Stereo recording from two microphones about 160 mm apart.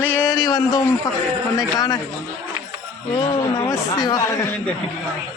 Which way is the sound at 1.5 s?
25° left (ahead or behind).